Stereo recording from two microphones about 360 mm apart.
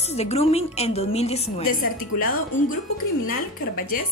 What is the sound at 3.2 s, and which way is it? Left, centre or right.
Speech, left.